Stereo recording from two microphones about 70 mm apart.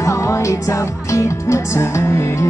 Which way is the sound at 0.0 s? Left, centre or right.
Left.